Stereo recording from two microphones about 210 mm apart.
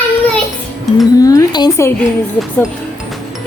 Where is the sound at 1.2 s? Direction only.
15° left (ahead or behind).